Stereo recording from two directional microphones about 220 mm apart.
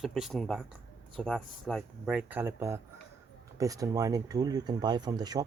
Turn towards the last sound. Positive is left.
turn(degrees=-20)  # may be behind; listen again after turning